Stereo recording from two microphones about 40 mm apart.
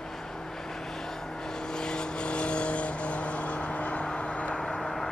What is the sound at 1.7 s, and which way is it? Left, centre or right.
Vehicle, centre.